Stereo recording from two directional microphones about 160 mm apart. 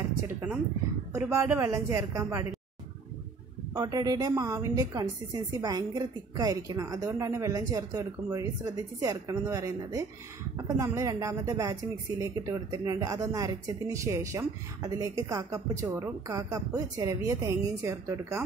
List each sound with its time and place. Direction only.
1.1 s a woman's voice: 15° right (ahead or behind)
3.7 s speech: 25° right (ahead or behind)